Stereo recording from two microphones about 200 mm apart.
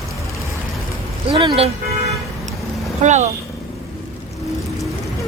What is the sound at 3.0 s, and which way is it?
Speech, 35° right (ahead or behind).